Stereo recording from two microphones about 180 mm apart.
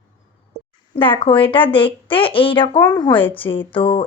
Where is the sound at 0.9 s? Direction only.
30° left (ahead or behind).